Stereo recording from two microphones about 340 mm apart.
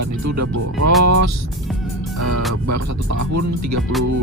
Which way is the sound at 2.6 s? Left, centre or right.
Right.